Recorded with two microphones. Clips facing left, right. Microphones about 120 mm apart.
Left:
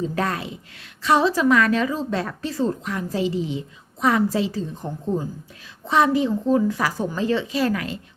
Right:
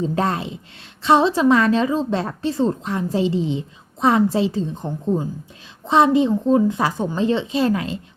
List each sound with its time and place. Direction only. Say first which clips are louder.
0.0 s a woman's voice: right 3 dB; 25° right (ahead or behind)